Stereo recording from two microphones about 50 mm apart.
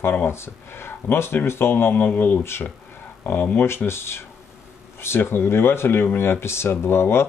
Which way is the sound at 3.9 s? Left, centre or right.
Left.